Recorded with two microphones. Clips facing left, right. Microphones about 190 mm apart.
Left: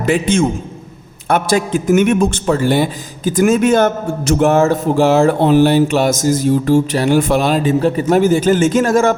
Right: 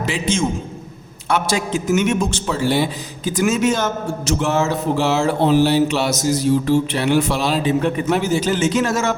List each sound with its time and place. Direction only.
0.0 s a man's voice: 55° left (ahead or behind)